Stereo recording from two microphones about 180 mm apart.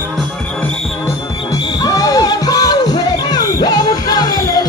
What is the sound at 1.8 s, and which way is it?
Music, 20° left (ahead or behind).